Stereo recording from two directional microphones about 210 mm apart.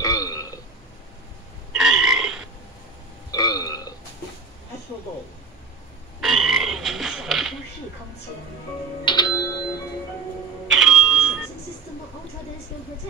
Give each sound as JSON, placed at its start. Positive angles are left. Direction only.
{"t": 0.0, "sound": "burping", "side_deg": 15}
{"t": 1.7, "sound": "burping", "side_deg": -5}
{"t": 3.3, "sound": "burping", "side_deg": 20}
{"t": 6.2, "sound": "a sound", "side_deg": 0}
{"t": 9.0, "sound": "music", "side_deg": 20}
{"t": 10.7, "sound": "doorbell", "side_deg": 0}